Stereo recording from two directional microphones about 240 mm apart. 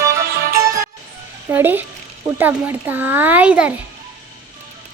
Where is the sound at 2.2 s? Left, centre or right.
Centre.